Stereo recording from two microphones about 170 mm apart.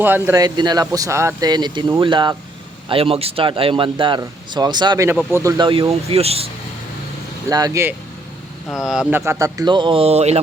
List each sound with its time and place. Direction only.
0.0 s speech: 10° right (ahead or behind); by 6.5 s 35° right (ahead or behind)
7.5 s speech: 20° right (ahead or behind)
8.9 s speech: 5° right (ahead or behind); by 10.4 s 40° right (ahead or behind)